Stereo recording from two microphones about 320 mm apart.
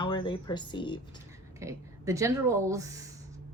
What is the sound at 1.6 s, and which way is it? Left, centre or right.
Speech, centre.